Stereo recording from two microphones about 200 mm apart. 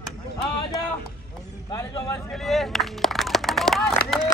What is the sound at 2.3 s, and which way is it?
Speech, centre (ahead or behind).